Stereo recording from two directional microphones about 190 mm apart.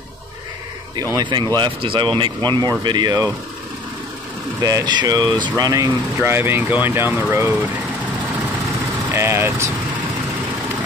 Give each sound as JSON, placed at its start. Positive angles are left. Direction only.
{"t": 0.9, "sound": "speech", "side_deg": -20}
{"t": 4.6, "sound": "speech", "side_deg": -20}
{"t": 9.1, "sound": "speech", "side_deg": -10}